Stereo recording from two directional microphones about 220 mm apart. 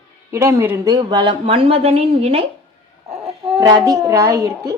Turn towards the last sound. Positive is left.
turn(degrees=-15)  # may be behind; listen again after turning